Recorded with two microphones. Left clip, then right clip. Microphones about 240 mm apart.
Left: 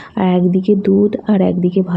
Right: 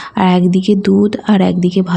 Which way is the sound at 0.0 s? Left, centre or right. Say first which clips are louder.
Right 3 dB; right.